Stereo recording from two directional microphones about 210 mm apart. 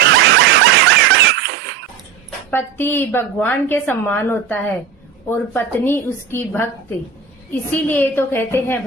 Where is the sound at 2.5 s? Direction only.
10° left (ahead or behind).